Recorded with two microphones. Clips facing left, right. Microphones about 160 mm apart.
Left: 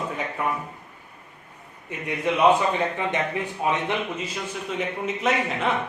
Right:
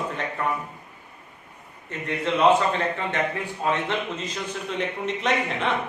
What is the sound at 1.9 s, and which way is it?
A man's voice, 15° left (ahead or behind).